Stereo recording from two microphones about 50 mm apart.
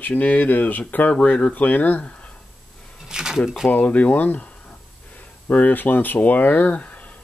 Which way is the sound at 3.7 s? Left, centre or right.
Left.